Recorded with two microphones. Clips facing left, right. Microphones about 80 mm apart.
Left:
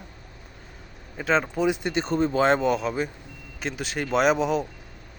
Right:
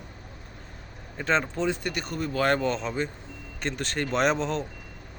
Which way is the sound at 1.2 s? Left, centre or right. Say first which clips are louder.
Left 3 dB; centre.